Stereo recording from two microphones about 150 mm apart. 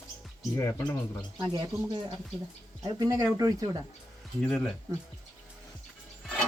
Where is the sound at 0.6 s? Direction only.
15° left (ahead or behind).